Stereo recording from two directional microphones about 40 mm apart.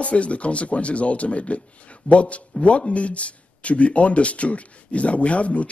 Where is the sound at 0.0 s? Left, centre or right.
Left.